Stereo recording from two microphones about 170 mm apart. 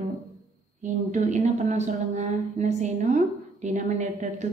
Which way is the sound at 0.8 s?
45° right (ahead or behind).